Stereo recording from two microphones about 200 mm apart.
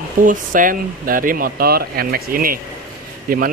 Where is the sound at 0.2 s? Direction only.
40° right (ahead or behind).